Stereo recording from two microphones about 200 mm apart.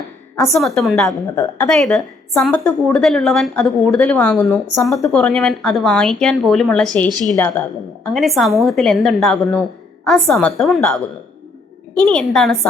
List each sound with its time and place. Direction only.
0.4 s a woman's voice: centre (ahead or behind)
7.1 s a woman's voice: 20° right (ahead or behind)
7.3 s a woman's voice: 10° left (ahead or behind)